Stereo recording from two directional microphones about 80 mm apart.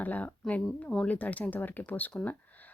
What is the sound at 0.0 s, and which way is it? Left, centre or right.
Speech, left.